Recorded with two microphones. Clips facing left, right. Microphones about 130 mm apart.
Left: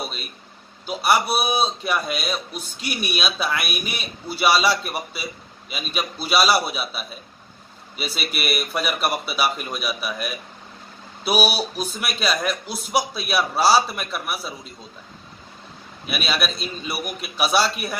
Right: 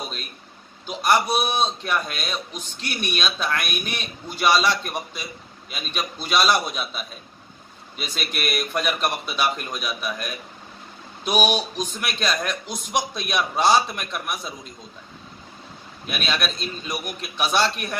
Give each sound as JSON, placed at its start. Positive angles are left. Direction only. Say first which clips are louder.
{"t": 0.0, "sound": "a sound", "louder": "left 2 dB", "side_deg": 5}
{"t": 0.8, "sound": "a man's voice", "louder": "even", "side_deg": 10}
{"t": 16.1, "sound": "a man's voice", "louder": "left 1 dB", "side_deg": 5}